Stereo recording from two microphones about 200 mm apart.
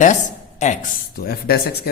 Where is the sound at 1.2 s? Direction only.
50° left (ahead or behind).